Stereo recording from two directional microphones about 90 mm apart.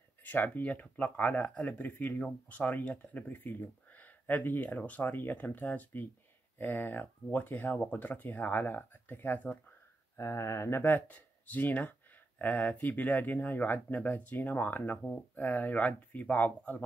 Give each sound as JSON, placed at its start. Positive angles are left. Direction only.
{"t": 0.2, "sound": "speech", "side_deg": 20}
{"t": 10.1, "sound": "speech", "side_deg": 35}